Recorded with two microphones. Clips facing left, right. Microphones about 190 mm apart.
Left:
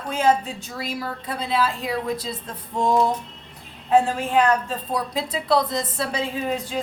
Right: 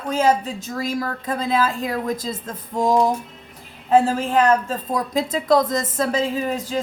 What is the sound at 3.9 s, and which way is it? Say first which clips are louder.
A woman's voice: right 2 dB; 40° right (ahead or behind).